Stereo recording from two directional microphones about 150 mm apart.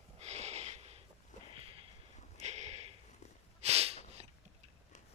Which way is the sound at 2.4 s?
50° right (ahead or behind).